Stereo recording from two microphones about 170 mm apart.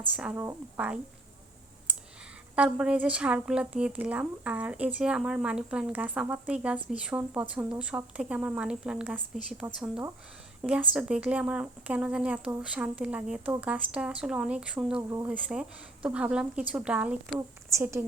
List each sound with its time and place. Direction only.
0.2 s speech: 5° right (ahead or behind)
2.6 s a woman's voice: 5° right (ahead or behind)